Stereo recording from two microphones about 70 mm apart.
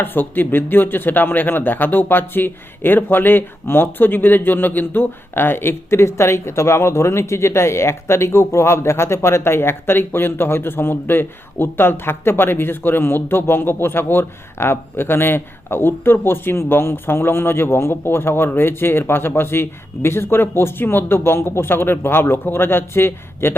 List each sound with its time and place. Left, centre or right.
0.0 s speech: left